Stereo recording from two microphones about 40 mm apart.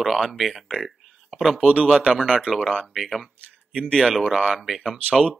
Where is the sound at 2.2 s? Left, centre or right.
Centre.